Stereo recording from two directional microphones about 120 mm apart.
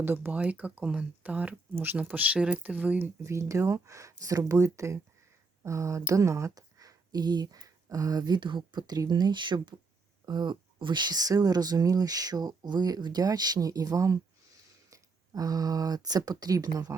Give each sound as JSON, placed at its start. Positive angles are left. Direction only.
{"t": 0.0, "sound": "speech", "side_deg": -15}
{"t": 3.2, "sound": "speech", "side_deg": -25}